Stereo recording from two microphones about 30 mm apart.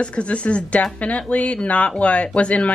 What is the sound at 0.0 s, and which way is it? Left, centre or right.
Speech, left.